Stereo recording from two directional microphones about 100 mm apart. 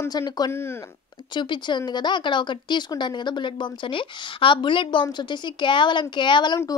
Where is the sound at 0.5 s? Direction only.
25° left (ahead or behind).